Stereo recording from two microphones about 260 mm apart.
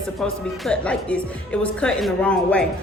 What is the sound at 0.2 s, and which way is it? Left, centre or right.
Music, centre.